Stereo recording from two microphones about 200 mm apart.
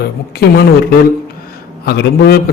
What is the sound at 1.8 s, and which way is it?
Speech, 55° left (ahead or behind).